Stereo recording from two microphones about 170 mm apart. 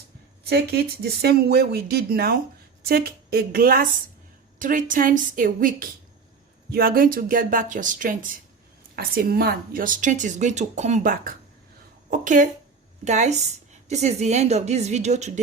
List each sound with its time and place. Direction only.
0.4 s a woman's voice: 70° right (ahead or behind); by 15.3 s 40° right (ahead or behind)